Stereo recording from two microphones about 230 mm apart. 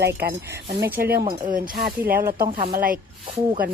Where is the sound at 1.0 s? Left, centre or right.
Right.